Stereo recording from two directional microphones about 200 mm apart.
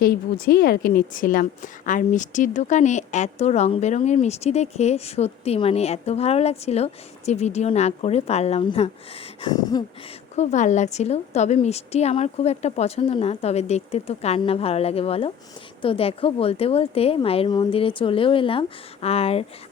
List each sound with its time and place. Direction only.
0.0 s a woman's voice: 50° left (ahead or behind); by 8.9 s 30° left (ahead or behind)
9.4 s a woman's voice: 20° left (ahead or behind)
10.3 s a woman's voice: 35° left (ahead or behind)